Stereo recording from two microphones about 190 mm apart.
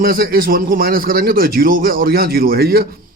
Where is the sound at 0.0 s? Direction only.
50° right (ahead or behind).